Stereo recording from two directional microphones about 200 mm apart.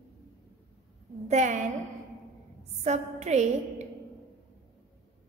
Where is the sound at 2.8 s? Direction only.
35° right (ahead or behind).